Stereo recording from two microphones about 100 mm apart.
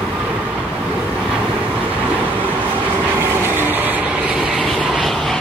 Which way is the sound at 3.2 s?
20° right (ahead or behind).